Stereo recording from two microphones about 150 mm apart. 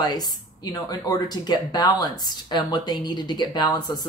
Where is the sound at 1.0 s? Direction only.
30° left (ahead or behind).